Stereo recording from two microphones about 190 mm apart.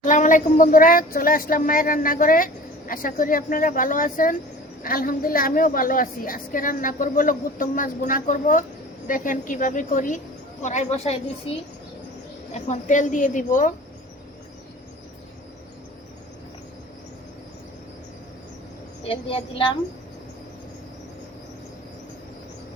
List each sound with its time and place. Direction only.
0.0 s a woman's voice: 40° left (ahead or behind)
12.5 s speech: 40° left (ahead or behind)
19.0 s a woman's voice: 30° left (ahead or behind)